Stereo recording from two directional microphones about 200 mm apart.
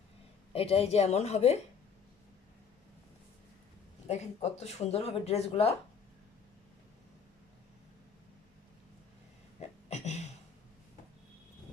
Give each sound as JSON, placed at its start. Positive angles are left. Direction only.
{"t": 0.5, "sound": "speech", "side_deg": 30}
{"t": 4.1, "sound": "speech", "side_deg": 35}
{"t": 9.6, "sound": "a sound", "side_deg": 35}